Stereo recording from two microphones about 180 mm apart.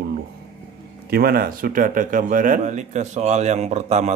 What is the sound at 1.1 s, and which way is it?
Speech, 55° right (ahead or behind).